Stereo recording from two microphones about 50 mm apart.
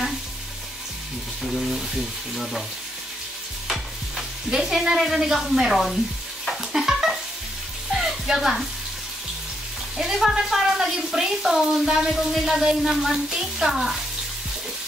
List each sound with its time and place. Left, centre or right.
1.6 s a woman's voice: centre
4.5 s a woman's voice: centre
6.5 s stir: centre
7.9 s music: centre
9.9 s a woman's voice: centre